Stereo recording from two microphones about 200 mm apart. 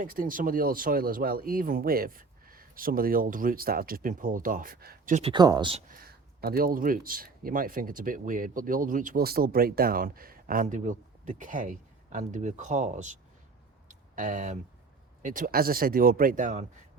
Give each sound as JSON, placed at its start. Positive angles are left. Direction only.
{"t": 0.0, "sound": "speech", "side_deg": -45}
{"t": 5.2, "sound": "speech", "side_deg": -20}
{"t": 5.9, "sound": "speech", "side_deg": -50}
{"t": 14.2, "sound": "speech", "side_deg": -40}